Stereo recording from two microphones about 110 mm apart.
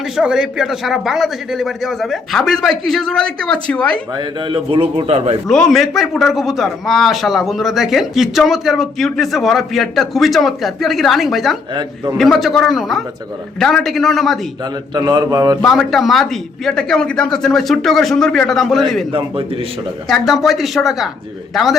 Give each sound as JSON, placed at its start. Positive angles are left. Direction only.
{"t": 0.2, "sound": "speech", "side_deg": -5}
{"t": 4.2, "sound": "a man's voice", "side_deg": -50}
{"t": 5.5, "sound": "speech", "side_deg": 5}
{"t": 11.7, "sound": "a man's voice", "side_deg": -45}
{"t": 12.1, "sound": "speech", "side_deg": 0}
{"t": 14.9, "sound": "speech", "side_deg": -35}
{"t": 15.6, "sound": "speech", "side_deg": 0}
{"t": 20.1, "sound": "speech", "side_deg": 0}